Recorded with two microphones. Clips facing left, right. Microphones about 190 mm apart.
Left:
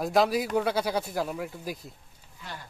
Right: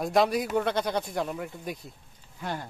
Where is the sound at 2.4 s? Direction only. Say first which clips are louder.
Right 8 dB; 50° right (ahead or behind).